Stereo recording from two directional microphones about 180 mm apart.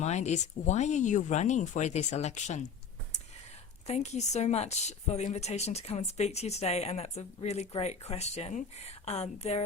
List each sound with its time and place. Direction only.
0.0 s a woman's voice: 40° left (ahead or behind)
3.8 s a woman's voice: 40° left (ahead or behind)